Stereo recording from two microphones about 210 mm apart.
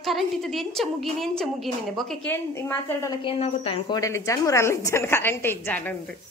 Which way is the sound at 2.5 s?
15° left (ahead or behind).